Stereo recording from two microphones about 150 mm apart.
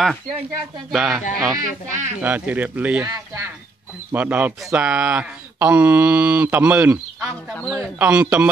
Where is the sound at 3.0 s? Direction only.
20° right (ahead or behind).